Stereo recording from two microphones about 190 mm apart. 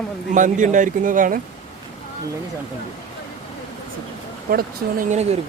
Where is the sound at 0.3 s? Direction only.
40° right (ahead or behind).